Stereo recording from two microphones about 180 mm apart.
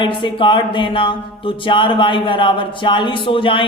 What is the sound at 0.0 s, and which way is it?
A man's voice, 25° left (ahead or behind).